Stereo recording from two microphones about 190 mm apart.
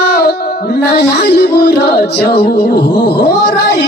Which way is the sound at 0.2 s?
55° left (ahead or behind).